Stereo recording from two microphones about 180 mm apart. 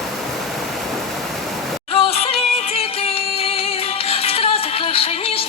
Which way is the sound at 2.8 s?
35° left (ahead or behind).